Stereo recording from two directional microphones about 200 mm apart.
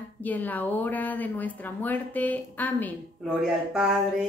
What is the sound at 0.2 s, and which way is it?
Speech, 10° left (ahead or behind).